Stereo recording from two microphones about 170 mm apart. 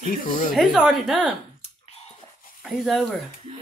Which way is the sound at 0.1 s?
55° left (ahead or behind).